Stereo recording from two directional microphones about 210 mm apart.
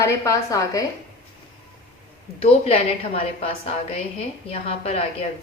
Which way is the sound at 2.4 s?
30° left (ahead or behind).